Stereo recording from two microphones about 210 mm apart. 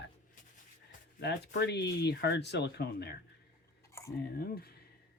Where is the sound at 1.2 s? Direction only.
55° left (ahead or behind).